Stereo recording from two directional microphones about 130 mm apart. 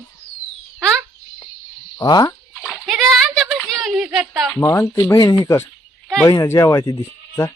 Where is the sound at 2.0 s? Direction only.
30° left (ahead or behind).